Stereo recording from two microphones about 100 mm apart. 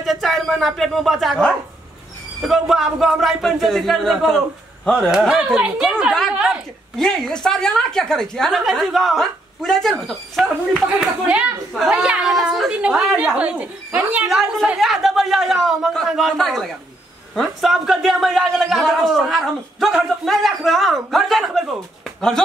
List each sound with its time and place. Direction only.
0.0 s a woman's voice: centre (ahead or behind)
5.5 s speech: 15° right (ahead or behind)
7.0 s a woman's voice: 5° left (ahead or behind)
11.0 s a woman's voice: 10° right (ahead or behind)